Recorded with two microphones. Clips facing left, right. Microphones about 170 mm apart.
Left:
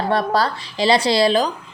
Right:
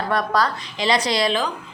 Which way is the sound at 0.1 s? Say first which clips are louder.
Left 1 dB; 30° left (ahead or behind).